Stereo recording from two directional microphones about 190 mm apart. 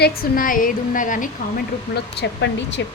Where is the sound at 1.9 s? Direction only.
65° left (ahead or behind).